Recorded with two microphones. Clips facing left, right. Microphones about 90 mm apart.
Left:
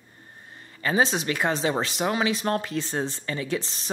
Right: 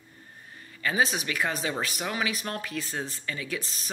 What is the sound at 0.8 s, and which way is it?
Speech, 25° left (ahead or behind).